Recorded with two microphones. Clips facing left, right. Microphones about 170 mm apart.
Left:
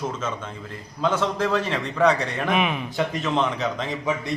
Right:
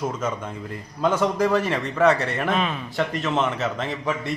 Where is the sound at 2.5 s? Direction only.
15° left (ahead or behind).